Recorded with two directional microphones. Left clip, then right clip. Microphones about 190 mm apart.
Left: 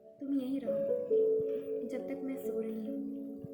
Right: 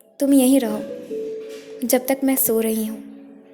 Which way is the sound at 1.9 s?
45° right (ahead or behind).